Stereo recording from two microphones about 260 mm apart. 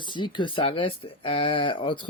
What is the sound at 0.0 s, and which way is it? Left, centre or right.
Speech, centre.